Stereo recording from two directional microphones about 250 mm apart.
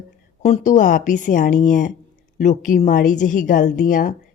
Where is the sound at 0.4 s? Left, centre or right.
Left.